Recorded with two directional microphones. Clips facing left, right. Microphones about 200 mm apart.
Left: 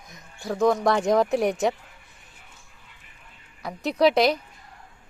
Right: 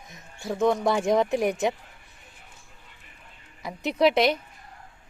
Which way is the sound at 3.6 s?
Centre (ahead or behind).